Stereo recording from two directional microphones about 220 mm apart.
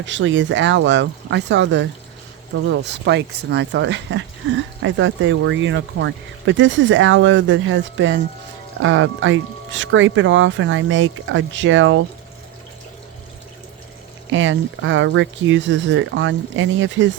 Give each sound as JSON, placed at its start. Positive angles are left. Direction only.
{"t": 0.0, "sound": "speech", "side_deg": -60}
{"t": 14.3, "sound": "speech", "side_deg": -60}